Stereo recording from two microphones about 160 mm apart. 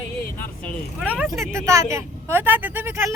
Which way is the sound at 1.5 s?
20° right (ahead or behind).